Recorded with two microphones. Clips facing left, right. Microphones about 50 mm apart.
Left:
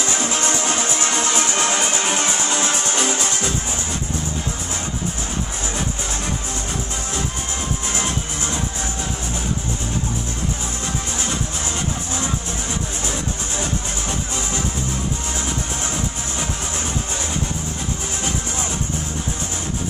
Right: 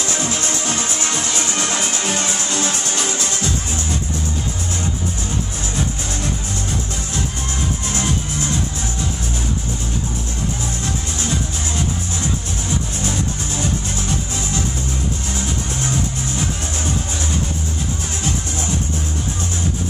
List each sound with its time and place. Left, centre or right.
0.1 s music: centre
7.9 s music: centre